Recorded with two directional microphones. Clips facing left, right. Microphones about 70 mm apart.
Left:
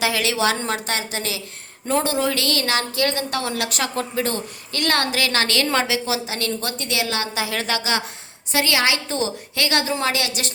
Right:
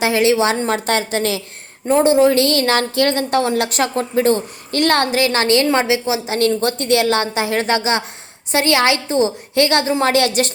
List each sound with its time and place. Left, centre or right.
0.0 s a woman's voice: right
0.9 s speech: right
1.9 s a woman's voice: right